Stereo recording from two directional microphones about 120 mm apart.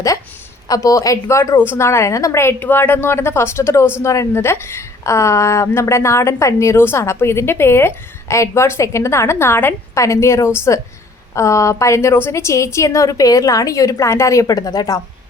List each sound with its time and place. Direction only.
0.7 s a woman's voice: 30° left (ahead or behind)